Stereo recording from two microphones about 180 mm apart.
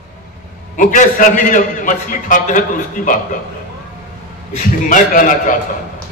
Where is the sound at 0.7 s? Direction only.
45° left (ahead or behind).